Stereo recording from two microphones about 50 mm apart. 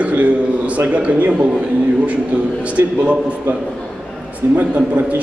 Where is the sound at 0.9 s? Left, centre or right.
Right.